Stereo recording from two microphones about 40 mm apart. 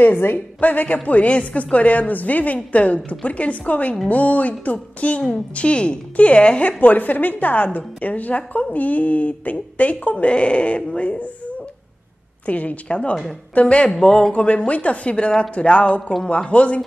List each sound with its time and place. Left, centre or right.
0.6 s a woman's voice: left
6.8 s a woman's voice: left
12.4 s a woman's voice: left
13.8 s speech: centre
14.3 s a woman's voice: left